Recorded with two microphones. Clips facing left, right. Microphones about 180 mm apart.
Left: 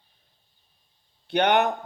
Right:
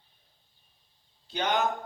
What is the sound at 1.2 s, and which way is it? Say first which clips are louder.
Speech: left 7 dB; 65° left (ahead or behind).